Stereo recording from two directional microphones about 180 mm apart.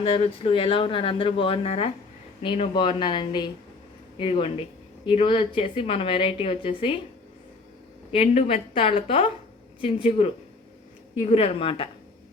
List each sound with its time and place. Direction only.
0.0 s a woman's voice: 30° left (ahead or behind)
8.1 s a woman's voice: 40° left (ahead or behind)